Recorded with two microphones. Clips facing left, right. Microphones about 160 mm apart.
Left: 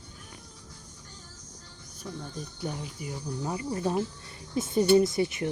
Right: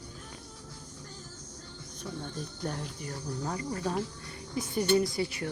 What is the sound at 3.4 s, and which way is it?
Speech, 20° left (ahead or behind).